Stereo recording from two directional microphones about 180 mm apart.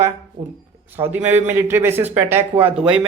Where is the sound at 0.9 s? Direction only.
10° right (ahead or behind).